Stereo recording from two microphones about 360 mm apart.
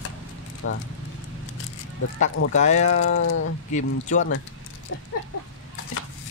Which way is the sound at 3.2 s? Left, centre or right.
Left.